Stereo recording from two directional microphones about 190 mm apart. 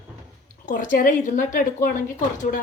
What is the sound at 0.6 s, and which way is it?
A woman's voice, 45° left (ahead or behind).